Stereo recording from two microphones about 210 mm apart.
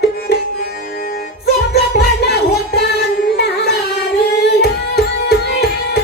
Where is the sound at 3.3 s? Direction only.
50° left (ahead or behind).